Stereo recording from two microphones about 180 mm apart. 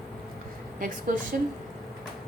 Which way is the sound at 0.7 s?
50° right (ahead or behind).